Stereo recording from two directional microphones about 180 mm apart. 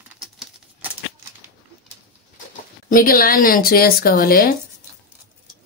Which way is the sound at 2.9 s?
50° left (ahead or behind).